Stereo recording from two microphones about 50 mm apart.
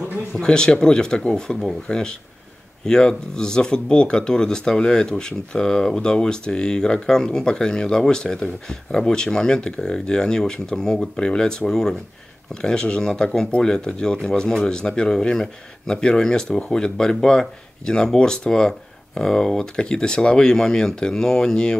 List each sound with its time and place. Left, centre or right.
0.4 s speech: centre